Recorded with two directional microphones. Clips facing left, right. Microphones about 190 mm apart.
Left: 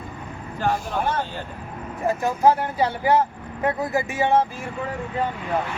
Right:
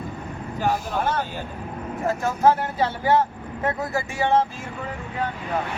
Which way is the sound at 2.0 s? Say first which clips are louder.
Left 1 dB; 15° left (ahead or behind).